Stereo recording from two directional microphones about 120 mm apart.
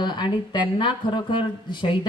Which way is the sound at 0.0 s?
40° left (ahead or behind).